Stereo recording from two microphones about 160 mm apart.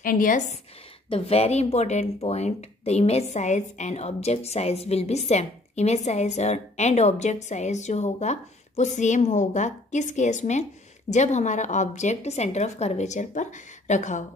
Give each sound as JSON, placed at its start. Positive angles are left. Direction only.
{"t": 0.0, "sound": "a woman's voice", "side_deg": 60}
{"t": 1.1, "sound": "speech", "side_deg": 40}